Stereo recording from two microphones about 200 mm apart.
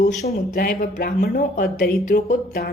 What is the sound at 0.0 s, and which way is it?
Speech, 40° left (ahead or behind).